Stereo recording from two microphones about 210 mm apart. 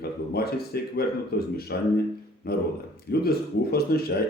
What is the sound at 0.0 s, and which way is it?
Speech, 50° left (ahead or behind).